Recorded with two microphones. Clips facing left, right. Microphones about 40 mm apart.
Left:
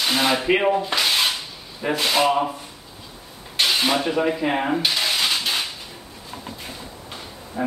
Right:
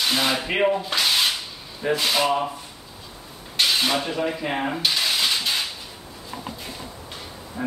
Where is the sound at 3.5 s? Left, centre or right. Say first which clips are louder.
Left 1 dB; centre.